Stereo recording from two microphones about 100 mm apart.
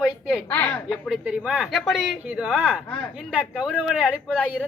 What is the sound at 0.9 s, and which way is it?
A man's voice, centre (ahead or behind).